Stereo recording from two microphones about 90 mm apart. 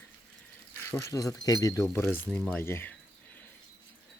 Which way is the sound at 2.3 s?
10° left (ahead or behind).